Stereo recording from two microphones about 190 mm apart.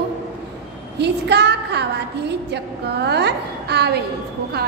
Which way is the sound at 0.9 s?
60° right (ahead or behind).